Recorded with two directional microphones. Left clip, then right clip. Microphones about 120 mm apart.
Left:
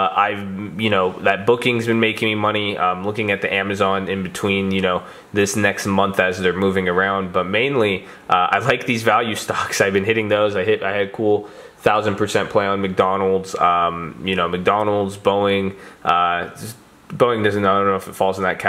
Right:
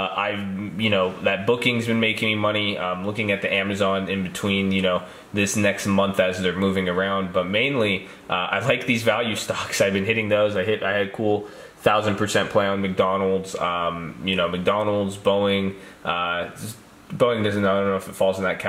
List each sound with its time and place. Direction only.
0.7 s speech: 40° left (ahead or behind); by 12.7 s 20° left (ahead or behind)
12.8 s speech: 45° left (ahead or behind)
14.3 s speech: 40° left (ahead or behind)